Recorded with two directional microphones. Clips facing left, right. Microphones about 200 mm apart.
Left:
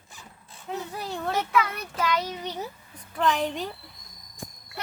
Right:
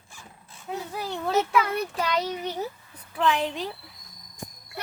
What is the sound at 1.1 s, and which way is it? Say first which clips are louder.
Speech: right 1 dB; centre (ahead or behind).